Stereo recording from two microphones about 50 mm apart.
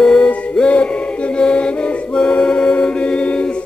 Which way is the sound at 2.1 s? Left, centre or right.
Centre.